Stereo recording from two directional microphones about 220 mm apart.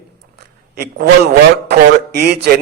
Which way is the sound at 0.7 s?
45° right (ahead or behind).